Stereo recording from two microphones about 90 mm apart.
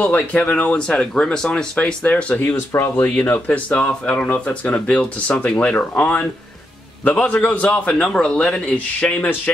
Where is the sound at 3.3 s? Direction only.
15° left (ahead or behind).